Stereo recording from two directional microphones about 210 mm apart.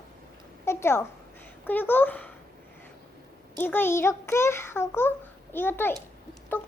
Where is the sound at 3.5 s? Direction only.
10° left (ahead or behind).